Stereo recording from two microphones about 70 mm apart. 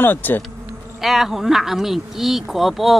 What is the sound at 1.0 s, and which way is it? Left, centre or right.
Speech, centre.